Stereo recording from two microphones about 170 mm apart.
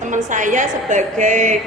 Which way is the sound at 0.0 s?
45° right (ahead or behind).